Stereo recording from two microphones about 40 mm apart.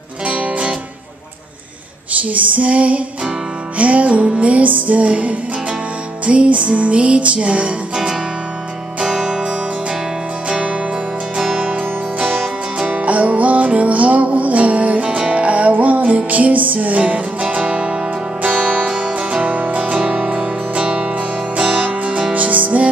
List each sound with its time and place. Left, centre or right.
0.3 s music: right
2.2 s music: right
7.9 s music: centre
10.5 s music: right
11.3 s music: centre
12.9 s music: right
18.4 s music: right
18.9 s music: right
19.5 s music: right
22.3 s music: right